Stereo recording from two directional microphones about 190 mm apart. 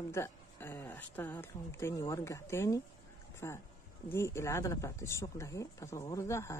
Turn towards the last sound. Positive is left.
turn(degrees=15)  # may be behind; listen again after turning